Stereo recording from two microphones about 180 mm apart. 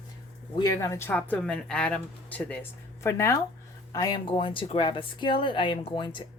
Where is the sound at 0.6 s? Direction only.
20° left (ahead or behind).